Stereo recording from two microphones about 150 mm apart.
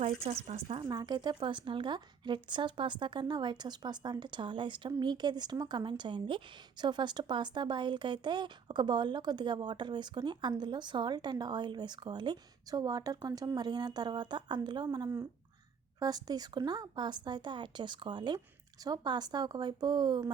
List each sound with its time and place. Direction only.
0.0 s speech: 45° right (ahead or behind)
0.9 s speech: 25° right (ahead or behind)